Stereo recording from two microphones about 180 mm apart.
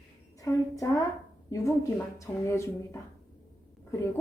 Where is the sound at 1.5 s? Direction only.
15° left (ahead or behind).